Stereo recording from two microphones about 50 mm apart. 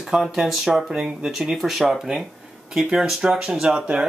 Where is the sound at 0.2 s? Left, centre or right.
Centre.